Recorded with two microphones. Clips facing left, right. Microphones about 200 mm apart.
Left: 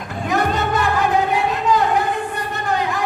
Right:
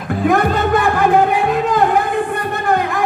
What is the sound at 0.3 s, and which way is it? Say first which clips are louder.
Music: right 5 dB; 55° right (ahead or behind).